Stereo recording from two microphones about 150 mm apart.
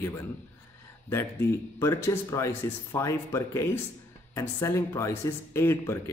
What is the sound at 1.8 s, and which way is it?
Speech, 20° left (ahead or behind).